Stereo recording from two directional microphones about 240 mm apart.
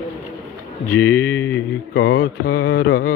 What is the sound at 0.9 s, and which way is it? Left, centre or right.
Mantra, centre.